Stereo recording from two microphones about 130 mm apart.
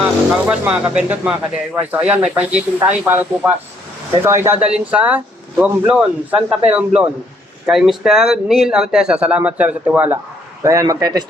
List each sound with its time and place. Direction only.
0.0 s speech: 10° right (ahead or behind); by 11.3 s 30° right (ahead or behind)